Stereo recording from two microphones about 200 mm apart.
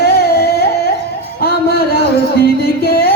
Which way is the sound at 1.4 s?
50° left (ahead or behind).